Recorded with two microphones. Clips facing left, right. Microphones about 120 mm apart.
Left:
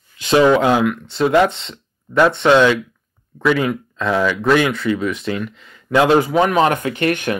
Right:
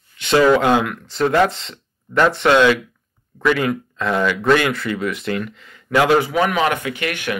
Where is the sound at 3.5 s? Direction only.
15° left (ahead or behind).